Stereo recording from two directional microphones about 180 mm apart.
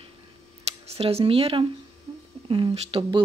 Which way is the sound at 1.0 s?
35° right (ahead or behind).